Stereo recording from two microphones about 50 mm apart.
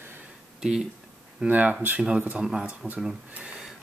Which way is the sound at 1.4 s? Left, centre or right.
Right.